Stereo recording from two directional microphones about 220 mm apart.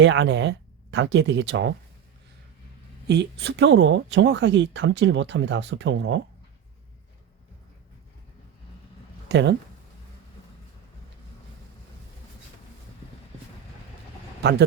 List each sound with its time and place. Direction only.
0.0 s speech: 55° right (ahead or behind)
3.1 s speech: 50° right (ahead or behind)
9.3 s speech: 55° right (ahead or behind)
14.4 s speech: 50° right (ahead or behind)